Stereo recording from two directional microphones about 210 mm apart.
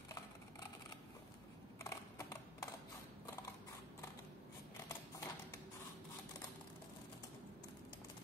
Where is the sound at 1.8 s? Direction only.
15° left (ahead or behind).